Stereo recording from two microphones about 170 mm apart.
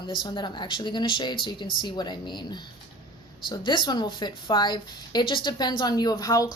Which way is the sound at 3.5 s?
25° left (ahead or behind).